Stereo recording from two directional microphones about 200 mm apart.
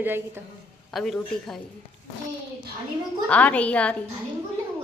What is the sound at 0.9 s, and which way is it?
Speech, centre (ahead or behind).